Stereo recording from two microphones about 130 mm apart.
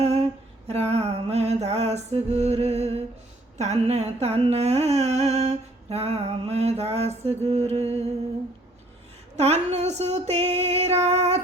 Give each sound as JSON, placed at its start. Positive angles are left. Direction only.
{"t": 0.0, "sound": "a sound", "side_deg": -55}
{"t": 0.7, "sound": "music", "side_deg": -55}
{"t": 9.3, "sound": "female singing", "side_deg": -55}